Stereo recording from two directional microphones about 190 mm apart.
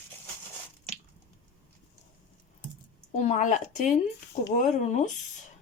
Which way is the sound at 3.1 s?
40° left (ahead or behind).